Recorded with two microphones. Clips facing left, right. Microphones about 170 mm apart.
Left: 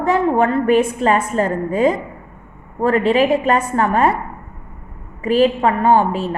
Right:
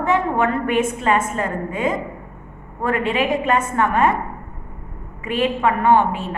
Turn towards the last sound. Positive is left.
turn(degrees=35)  # may be behind; listen again after turning